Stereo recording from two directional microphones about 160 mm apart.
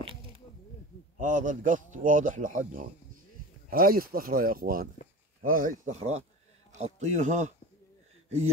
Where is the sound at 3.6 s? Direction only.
65° right (ahead or behind).